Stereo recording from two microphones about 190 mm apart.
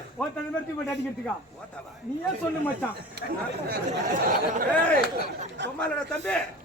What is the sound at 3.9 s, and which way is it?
Speech, 45° right (ahead or behind).